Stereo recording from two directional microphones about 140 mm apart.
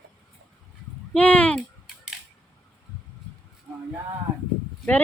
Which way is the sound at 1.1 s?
10° left (ahead or behind).